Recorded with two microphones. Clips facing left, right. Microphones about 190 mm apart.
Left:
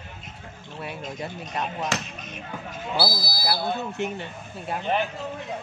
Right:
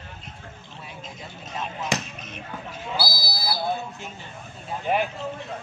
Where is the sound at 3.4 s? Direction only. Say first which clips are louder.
Left 1 dB; 70° left (ahead or behind).